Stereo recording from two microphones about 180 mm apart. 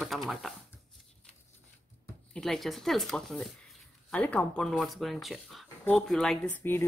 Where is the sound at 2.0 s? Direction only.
5° left (ahead or behind).